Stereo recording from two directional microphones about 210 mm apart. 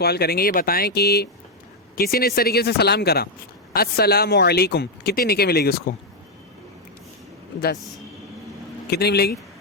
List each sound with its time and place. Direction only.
0.0 s speech: 50° left (ahead or behind)
8.9 s speech: 50° left (ahead or behind)